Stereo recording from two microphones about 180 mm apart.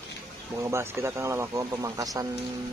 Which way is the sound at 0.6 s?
15° right (ahead or behind).